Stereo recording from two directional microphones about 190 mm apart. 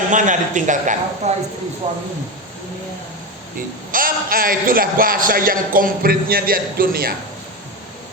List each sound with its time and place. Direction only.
0.1 s a man's voice: 40° right (ahead or behind)
3.9 s a man's voice: 50° right (ahead or behind)